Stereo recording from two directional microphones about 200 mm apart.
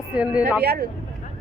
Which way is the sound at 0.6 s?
55° right (ahead or behind).